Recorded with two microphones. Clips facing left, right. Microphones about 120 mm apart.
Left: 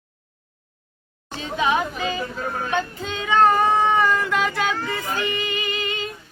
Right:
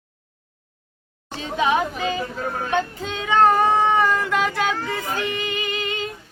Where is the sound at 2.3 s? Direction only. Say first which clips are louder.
Right 1 dB; 35° right (ahead or behind).